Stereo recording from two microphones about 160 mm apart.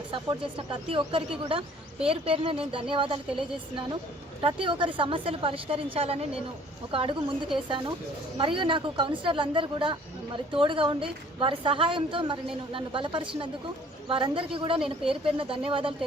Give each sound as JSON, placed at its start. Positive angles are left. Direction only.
{"t": 0.1, "sound": "a woman's voice", "side_deg": -30}